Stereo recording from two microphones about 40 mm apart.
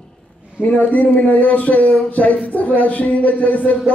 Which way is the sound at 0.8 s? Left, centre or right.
Left.